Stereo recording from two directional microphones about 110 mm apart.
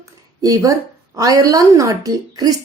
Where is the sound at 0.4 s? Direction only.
30° right (ahead or behind).